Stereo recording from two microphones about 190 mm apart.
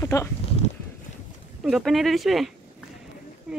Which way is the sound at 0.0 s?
15° left (ahead or behind).